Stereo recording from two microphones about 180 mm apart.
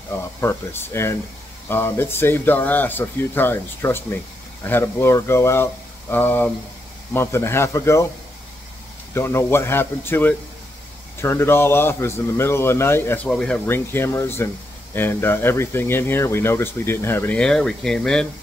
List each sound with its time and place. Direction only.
0.1 s speech: 15° left (ahead or behind)
9.1 s speech: 15° left (ahead or behind)